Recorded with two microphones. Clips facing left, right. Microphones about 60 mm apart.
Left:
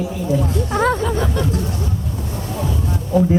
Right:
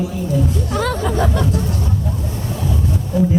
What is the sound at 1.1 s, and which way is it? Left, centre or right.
Vehicle, right.